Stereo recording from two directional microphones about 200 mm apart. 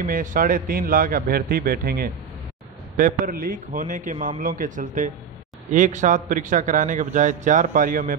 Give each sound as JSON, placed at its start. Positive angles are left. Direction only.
{"t": 0.0, "sound": "a man's voice", "side_deg": -40}